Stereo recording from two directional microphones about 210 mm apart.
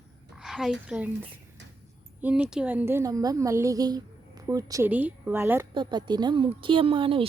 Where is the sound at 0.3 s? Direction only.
Centre (ahead or behind).